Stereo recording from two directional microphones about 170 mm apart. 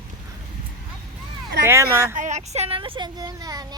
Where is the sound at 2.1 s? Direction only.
45° right (ahead or behind); by 3.7 s 20° right (ahead or behind).